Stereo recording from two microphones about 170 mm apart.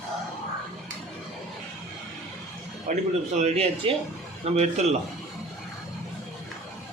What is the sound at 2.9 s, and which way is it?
Speech, 50° right (ahead or behind).